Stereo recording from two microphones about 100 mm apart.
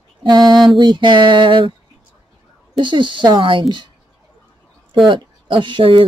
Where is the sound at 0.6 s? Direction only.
50° right (ahead or behind).